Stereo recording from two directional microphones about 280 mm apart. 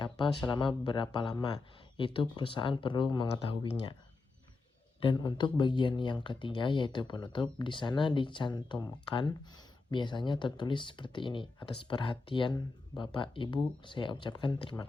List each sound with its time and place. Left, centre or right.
0.0 s speech: centre
4.9 s speech: centre